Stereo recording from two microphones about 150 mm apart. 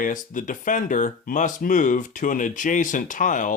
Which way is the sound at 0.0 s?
60° left (ahead or behind).